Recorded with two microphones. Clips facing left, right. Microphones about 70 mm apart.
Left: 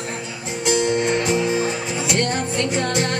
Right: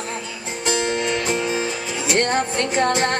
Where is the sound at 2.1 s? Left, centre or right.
Right.